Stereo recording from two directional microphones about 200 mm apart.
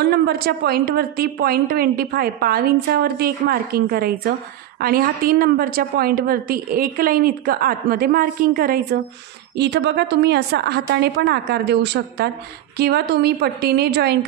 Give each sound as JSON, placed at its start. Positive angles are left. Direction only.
{"t": 0.0, "sound": "a woman's voice", "side_deg": -55}